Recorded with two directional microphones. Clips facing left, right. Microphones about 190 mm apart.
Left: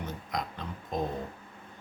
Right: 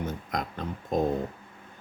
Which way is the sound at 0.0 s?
50° right (ahead or behind).